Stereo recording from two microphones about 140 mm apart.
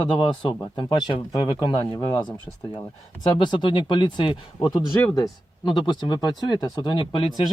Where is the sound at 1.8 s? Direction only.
20° left (ahead or behind).